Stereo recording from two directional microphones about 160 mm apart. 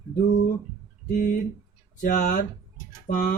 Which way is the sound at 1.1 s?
60° left (ahead or behind).